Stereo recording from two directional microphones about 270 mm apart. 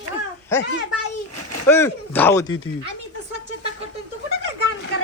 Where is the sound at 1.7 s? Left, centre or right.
Centre.